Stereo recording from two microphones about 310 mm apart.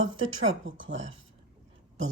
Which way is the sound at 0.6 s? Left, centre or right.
Right.